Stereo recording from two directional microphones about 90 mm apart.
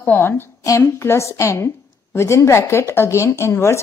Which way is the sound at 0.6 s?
35° left (ahead or behind).